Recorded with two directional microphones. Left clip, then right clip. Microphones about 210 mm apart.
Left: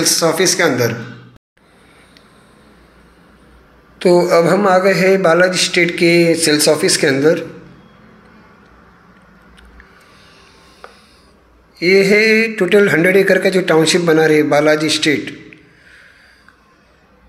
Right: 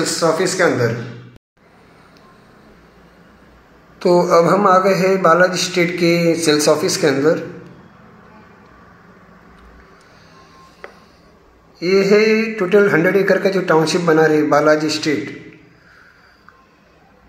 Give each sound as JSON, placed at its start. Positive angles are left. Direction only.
{"t": 0.2, "sound": "speech", "side_deg": 35}
{"t": 4.0, "sound": "speech", "side_deg": 25}
{"t": 11.8, "sound": "speech", "side_deg": 25}